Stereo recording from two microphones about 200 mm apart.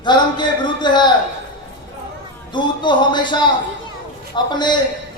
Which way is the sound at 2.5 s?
25° left (ahead or behind).